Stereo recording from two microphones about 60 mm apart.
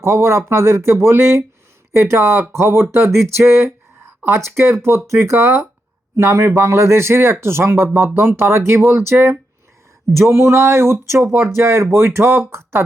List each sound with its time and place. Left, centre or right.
0.0 s speech: right